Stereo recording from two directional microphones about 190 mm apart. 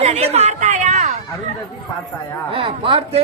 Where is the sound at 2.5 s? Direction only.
30° right (ahead or behind).